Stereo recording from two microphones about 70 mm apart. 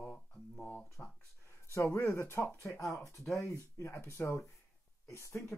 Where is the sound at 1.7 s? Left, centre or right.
Left.